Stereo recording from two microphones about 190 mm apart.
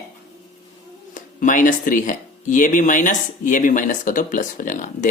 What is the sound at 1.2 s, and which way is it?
Speech, 45° left (ahead or behind).